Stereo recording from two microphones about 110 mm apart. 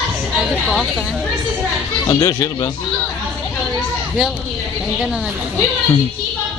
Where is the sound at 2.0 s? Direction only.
30° left (ahead or behind).